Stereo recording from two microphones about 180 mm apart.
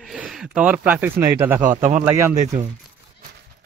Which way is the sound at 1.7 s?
45° right (ahead or behind).